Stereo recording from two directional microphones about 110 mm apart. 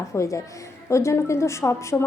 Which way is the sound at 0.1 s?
25° left (ahead or behind).